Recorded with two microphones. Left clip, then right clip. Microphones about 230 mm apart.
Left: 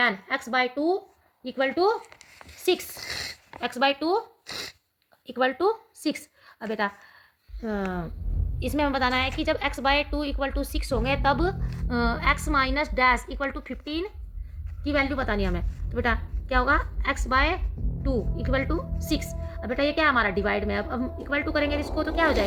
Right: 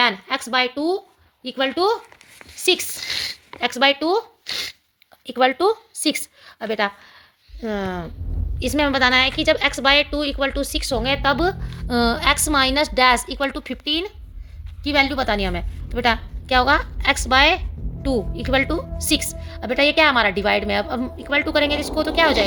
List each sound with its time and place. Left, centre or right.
0.0 s a woman's voice: right
2.9 s speech: centre
3.6 s speech: right
4.4 s zipper: centre
5.2 s a woman's voice: right
11.9 s a woman's voice: right